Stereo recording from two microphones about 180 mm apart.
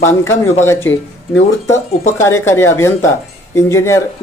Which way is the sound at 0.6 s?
15° left (ahead or behind).